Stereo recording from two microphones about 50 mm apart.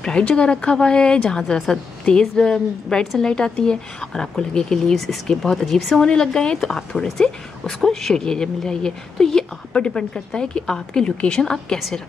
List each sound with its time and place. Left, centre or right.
0.2 s a woman's voice: left
4.9 s a woman's voice: centre